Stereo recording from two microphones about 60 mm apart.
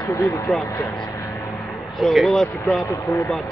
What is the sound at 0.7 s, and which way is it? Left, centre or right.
Speech, left.